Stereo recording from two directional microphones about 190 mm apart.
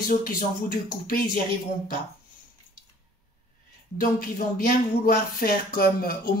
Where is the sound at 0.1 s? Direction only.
50° left (ahead or behind).